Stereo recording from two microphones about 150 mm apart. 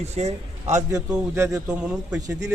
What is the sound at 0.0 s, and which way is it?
Speech, 45° right (ahead or behind).